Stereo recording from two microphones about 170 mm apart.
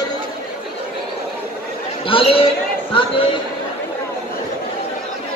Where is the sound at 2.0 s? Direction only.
30° left (ahead or behind).